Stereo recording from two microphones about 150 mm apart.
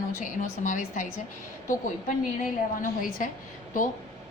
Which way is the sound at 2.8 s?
65° left (ahead or behind).